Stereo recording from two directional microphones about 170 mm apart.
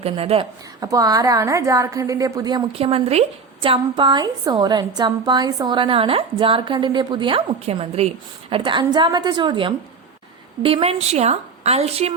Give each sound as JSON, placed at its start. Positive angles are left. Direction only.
{"t": 0.0, "sound": "a woman's voice", "side_deg": -35}
{"t": 0.8, "sound": "a woman's voice", "side_deg": -20}